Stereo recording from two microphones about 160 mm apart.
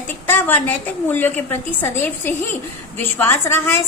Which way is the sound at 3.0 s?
15° left (ahead or behind).